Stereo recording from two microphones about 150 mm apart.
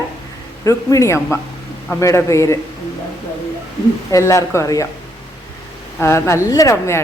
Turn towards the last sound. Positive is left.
turn(degrees=20)  # may be behind; listen again after turning